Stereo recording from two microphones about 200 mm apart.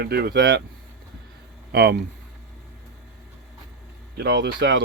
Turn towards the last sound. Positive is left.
turn(degrees=-55)  # may be behind; listen again after turning